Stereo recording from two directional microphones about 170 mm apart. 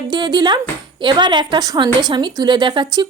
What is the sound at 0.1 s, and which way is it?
A woman's voice, 25° right (ahead or behind).